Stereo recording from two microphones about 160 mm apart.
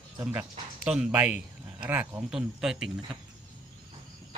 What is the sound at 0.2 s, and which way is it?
Speech, 15° right (ahead or behind).